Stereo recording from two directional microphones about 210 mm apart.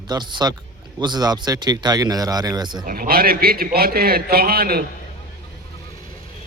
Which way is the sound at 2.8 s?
45° right (ahead or behind).